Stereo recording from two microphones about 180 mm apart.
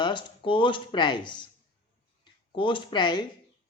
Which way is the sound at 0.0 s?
25° left (ahead or behind).